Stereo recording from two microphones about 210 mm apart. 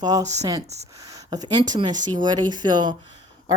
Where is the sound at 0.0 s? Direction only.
15° right (ahead or behind).